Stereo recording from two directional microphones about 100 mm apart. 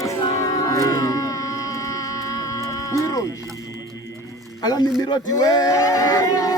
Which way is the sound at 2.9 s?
35° left (ahead or behind).